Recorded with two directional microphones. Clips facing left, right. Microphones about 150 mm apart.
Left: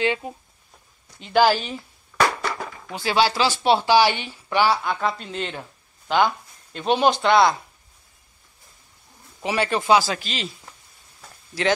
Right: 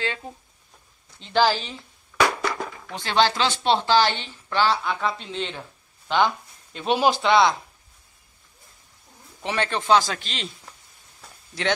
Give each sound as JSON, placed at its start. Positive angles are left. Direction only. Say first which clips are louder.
{"t": 0.0, "sound": "a man's voice", "louder": "left 7 dB", "side_deg": 15}
{"t": 9.4, "sound": "a man's voice", "louder": "left 3 dB", "side_deg": 5}
{"t": 11.1, "sound": "a sound", "louder": "left 4 dB", "side_deg": 0}